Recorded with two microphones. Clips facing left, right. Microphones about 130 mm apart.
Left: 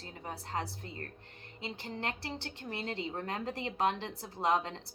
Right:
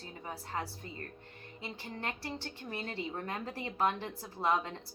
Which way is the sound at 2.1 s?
30° left (ahead or behind).